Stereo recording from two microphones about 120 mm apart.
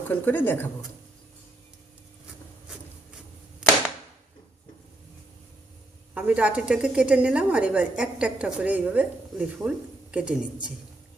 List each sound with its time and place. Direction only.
0.1 s speech: 15° left (ahead or behind)
6.1 s a woman's voice: 10° right (ahead or behind)